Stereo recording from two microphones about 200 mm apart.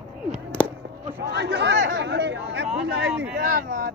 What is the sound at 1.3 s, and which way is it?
Chatter, 60° right (ahead or behind).